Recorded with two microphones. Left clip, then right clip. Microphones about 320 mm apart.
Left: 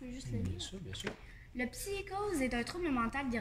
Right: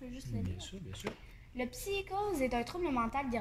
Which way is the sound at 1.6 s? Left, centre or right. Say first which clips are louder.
Right 2 dB; centre.